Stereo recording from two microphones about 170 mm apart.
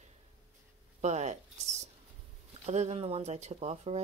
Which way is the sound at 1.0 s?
40° right (ahead or behind).